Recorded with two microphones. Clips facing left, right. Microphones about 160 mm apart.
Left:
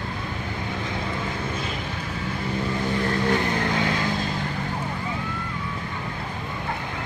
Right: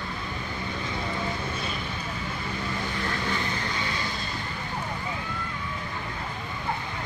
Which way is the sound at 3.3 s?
60° left (ahead or behind).